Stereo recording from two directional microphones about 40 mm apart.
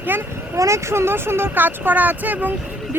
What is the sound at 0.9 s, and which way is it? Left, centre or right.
Speech, right.